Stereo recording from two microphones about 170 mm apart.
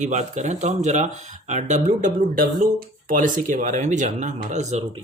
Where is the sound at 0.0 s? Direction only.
45° right (ahead or behind).